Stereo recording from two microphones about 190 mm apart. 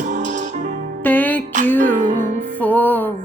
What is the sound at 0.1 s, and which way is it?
Music, 40° right (ahead or behind).